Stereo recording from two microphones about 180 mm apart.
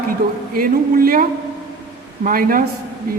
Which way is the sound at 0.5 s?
55° right (ahead or behind).